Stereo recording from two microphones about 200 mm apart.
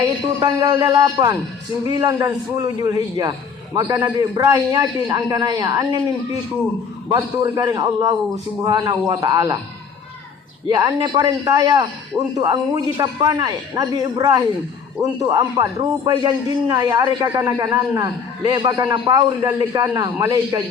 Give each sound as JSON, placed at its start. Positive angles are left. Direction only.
{"t": 0.0, "sound": "a man's voice", "side_deg": -20}
{"t": 7.1, "sound": "a man's voice", "side_deg": -20}
{"t": 10.8, "sound": "a man's voice", "side_deg": -20}